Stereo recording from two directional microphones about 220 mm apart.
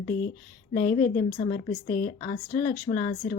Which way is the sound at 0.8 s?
40° left (ahead or behind).